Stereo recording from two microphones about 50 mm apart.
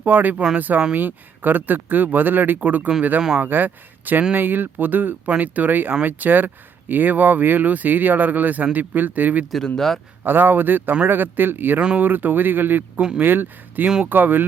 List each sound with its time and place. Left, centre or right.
0.0 s speech: right
3.2 s speech: centre
3.4 s speech: right
9.7 s a man's voice: centre
10.2 s speech: right